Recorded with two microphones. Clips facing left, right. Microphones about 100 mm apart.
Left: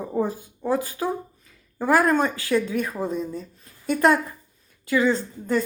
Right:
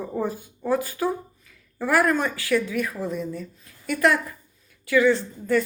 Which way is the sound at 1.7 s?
25° left (ahead or behind).